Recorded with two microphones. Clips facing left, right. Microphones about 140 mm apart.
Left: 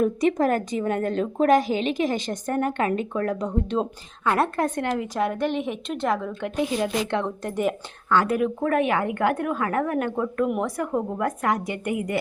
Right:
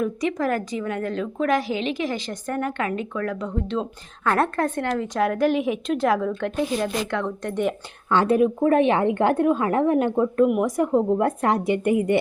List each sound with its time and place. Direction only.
0.0 s a woman's voice: 45° left (ahead or behind)
4.3 s a woman's voice: 10° left (ahead or behind)
5.2 s a woman's voice: centre (ahead or behind)
6.6 s a woman's voice: 15° left (ahead or behind)
7.1 s speech: 25° left (ahead or behind)
8.1 s a woman's voice: 25° right (ahead or behind)
10.9 s a woman's voice: 30° right (ahead or behind)